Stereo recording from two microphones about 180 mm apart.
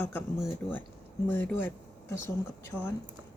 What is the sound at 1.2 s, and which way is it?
Speech, 10° left (ahead or behind).